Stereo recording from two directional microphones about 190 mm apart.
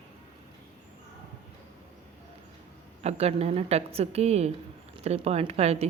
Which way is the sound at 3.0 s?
35° right (ahead or behind).